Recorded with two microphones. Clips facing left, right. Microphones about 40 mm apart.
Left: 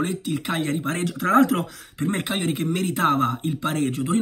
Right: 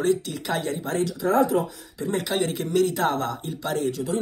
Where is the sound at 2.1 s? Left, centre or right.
Left.